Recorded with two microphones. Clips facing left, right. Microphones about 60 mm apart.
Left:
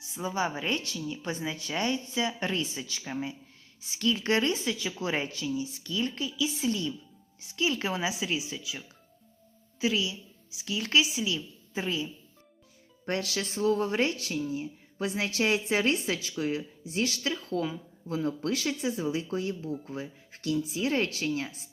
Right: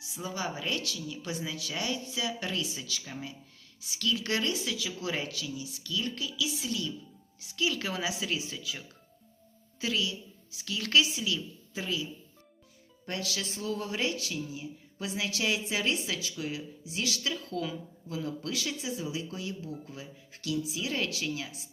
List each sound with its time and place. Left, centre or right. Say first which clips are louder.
0.0 s a woman's voice: left 5 dB; left; by 8.8 s centre
9.8 s a woman's voice: left 3 dB; left
11.7 s a woman's voice: left 3 dB; left
13.1 s a woman's voice: left 4 dB; left